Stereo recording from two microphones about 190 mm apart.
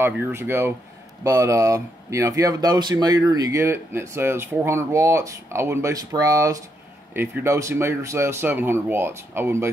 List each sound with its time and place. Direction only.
0.0 s speech: 15° right (ahead or behind)